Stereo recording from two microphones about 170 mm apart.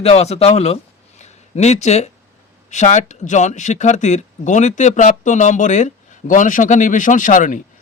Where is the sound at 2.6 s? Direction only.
45° left (ahead or behind).